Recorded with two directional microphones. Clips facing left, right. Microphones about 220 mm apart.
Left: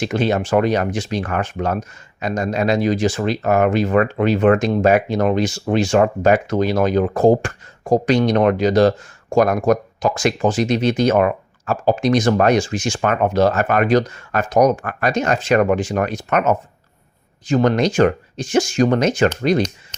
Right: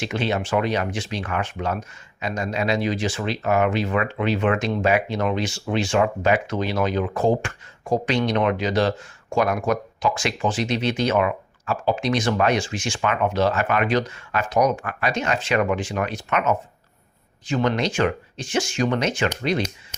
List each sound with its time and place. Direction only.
0.0 s speech: 45° left (ahead or behind)